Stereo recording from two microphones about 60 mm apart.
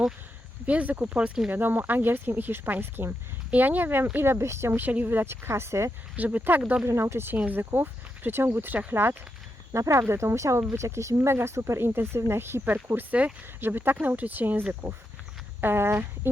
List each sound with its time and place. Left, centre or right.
0.6 s speech: right
3.5 s speech: right
4.8 s speech: right
6.1 s speech: right
6.8 s speech: right
7.3 s speech: right
7.6 s speech: right
9.7 s speech: right
10.0 s speech: right
10.6 s speech: right
10.8 s speech: right
11.8 s speech: right
12.6 s speech: right
13.6 s speech: right